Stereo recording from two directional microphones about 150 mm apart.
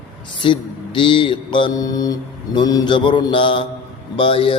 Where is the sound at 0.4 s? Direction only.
35° left (ahead or behind).